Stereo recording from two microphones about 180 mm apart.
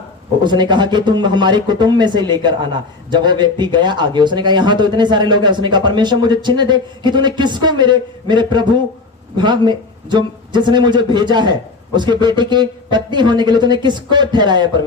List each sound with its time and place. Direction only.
0.4 s a man's voice: 25° right (ahead or behind)